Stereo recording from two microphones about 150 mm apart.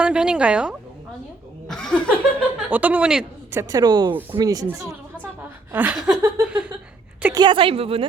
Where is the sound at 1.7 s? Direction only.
5° left (ahead or behind).